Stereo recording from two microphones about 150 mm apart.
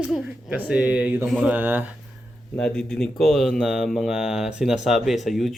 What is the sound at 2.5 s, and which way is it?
Speech, 5° left (ahead or behind).